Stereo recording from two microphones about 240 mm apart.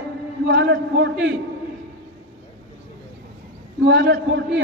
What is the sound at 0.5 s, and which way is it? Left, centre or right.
Speech, right.